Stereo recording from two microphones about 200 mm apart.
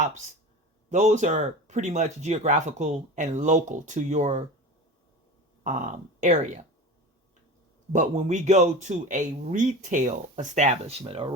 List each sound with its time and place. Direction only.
0.9 s speech: 35° right (ahead or behind)
5.6 s speech: 40° right (ahead or behind)
7.9 s speech: 35° right (ahead or behind)